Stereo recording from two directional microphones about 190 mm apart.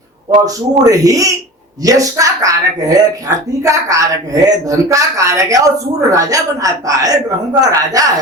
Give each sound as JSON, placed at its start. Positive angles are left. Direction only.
{"t": 0.3, "sound": "speech", "side_deg": -20}